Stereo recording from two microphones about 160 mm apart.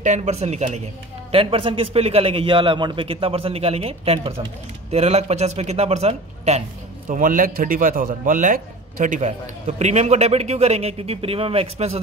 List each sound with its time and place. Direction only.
0.0 s a man's voice: 45° right (ahead or behind)
1.3 s a man's voice: 35° right (ahead or behind)
7.1 s a man's voice: 55° right (ahead or behind); by 12.0 s 40° right (ahead or behind)